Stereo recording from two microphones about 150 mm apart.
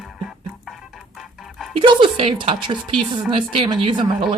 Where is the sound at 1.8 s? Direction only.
35° right (ahead or behind).